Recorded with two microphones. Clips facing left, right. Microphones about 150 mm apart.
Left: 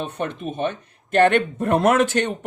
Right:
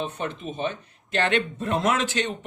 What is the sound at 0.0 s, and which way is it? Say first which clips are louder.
A man's voice: left 3 dB; 60° left (ahead or behind).